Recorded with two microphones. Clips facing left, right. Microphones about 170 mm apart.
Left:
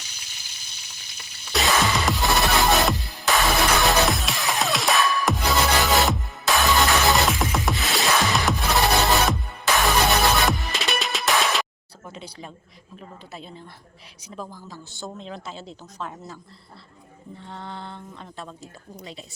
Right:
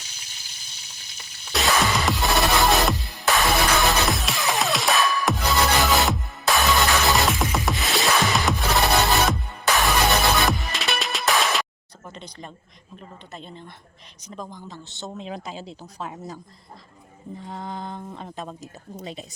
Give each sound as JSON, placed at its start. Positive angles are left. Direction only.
{"t": 1.5, "sound": "music", "side_deg": 0}
{"t": 12.0, "sound": "a sound", "side_deg": 5}
{"t": 13.0, "sound": "a woman's voice", "side_deg": 5}
{"t": 14.6, "sound": "speech", "side_deg": -20}
{"t": 16.1, "sound": "mantra", "side_deg": -15}
{"t": 17.4, "sound": "mantra", "side_deg": -10}
{"t": 18.9, "sound": "speech", "side_deg": -20}